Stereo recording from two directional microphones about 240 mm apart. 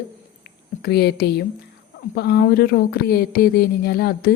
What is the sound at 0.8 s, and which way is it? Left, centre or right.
Speech, left.